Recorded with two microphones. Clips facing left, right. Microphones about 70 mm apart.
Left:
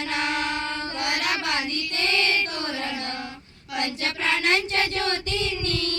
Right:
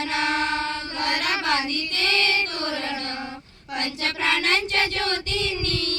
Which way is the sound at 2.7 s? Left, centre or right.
Right.